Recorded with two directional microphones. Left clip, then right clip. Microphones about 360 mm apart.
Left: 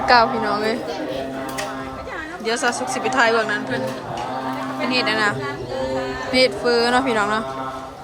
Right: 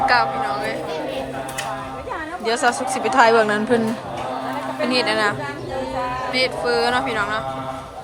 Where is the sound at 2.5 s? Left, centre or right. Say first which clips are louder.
Right 2 dB; centre.